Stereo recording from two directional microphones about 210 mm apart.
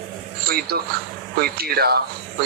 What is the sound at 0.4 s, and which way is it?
Speech, 45° right (ahead or behind).